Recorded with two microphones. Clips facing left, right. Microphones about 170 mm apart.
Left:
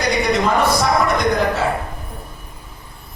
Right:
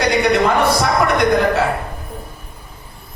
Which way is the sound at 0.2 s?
65° right (ahead or behind).